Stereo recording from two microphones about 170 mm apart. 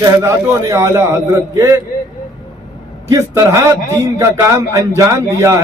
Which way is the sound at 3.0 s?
20° right (ahead or behind).